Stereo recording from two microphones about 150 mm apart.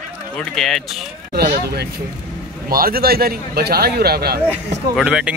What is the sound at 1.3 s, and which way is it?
A man's voice, 90° right.